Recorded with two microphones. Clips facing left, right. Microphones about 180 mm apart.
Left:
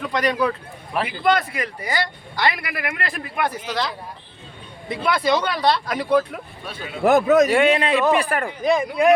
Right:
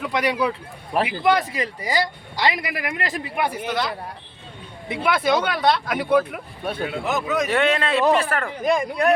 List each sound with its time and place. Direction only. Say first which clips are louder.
0.0 s speech: left 1 dB; 10° right (ahead or behind)
4.9 s speech: even; 5° right (ahead or behind)
6.7 s speech: right 9 dB; 55° right (ahead or behind)
7.0 s speech: left 11 dB; 55° left (ahead or behind)
7.4 s a man's voice: left 3 dB; 10° left (ahead or behind)
8.6 s speech: left 3 dB; 5° left (ahead or behind)